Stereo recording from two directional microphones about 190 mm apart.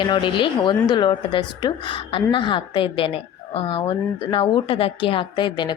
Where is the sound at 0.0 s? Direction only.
25° left (ahead or behind).